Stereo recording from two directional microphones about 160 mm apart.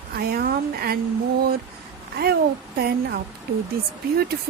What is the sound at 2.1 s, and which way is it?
A woman's voice, 80° right.